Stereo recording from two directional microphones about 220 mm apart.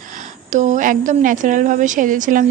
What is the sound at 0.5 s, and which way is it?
A woman's voice, 35° right (ahead or behind).